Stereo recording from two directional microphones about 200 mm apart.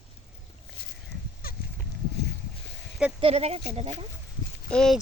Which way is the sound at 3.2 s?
30° right (ahead or behind).